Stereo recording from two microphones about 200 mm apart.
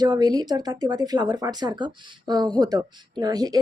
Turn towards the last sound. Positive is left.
turn(degrees=-20)  # may be behind; listen again after turning